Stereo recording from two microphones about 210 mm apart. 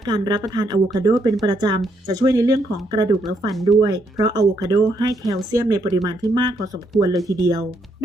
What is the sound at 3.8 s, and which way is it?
Speech, 20° right (ahead or behind).